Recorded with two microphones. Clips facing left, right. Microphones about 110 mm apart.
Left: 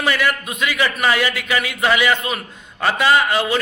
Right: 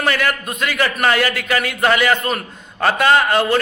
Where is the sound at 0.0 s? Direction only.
Centre (ahead or behind).